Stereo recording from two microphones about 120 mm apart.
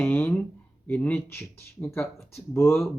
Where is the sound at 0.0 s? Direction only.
15° left (ahead or behind).